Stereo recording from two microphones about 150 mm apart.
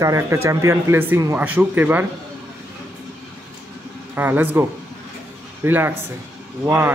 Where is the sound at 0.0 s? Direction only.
20° right (ahead or behind).